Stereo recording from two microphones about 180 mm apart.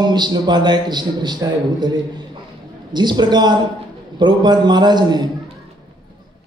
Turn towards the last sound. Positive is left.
turn(degrees=-25)  # may be behind; listen again after turning